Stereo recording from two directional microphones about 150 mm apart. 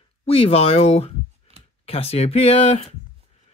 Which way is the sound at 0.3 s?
40° left (ahead or behind).